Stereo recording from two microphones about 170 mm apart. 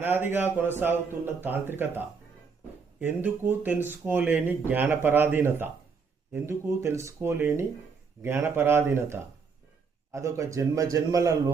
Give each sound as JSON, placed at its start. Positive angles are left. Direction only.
{"t": 0.0, "sound": "a man's voice", "side_deg": -10}